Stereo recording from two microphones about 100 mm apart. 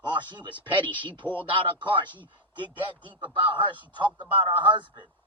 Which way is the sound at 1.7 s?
50° right (ahead or behind).